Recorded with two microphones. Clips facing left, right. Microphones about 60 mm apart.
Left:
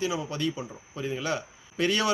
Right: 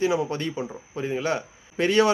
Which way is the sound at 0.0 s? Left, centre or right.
Right.